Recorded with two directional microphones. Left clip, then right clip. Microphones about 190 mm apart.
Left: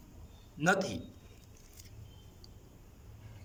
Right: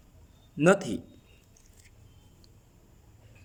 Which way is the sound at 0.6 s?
50° right (ahead or behind).